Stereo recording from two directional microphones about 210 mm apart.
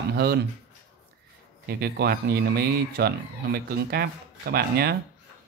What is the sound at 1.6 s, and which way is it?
Speech, 50° right (ahead or behind).